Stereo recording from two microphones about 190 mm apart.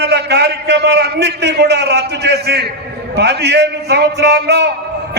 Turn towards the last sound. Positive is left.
turn(degrees=-60)  # may be behind; listen again after turning